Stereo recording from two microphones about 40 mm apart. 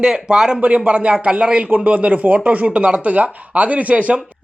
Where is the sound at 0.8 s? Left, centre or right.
Right.